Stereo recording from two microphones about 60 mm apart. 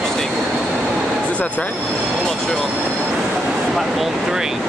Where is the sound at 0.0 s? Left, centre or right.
Centre.